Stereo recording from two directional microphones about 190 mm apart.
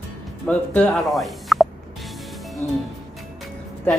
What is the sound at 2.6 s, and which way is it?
Music, 40° left (ahead or behind).